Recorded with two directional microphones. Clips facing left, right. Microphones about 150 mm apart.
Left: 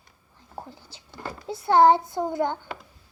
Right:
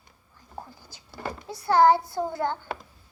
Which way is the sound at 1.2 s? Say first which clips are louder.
Right 2 dB; 20° right (ahead or behind).